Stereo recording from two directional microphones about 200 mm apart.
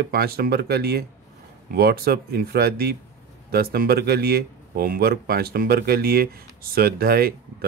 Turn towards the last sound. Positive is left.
turn(degrees=-50)  # may be behind; listen again after turning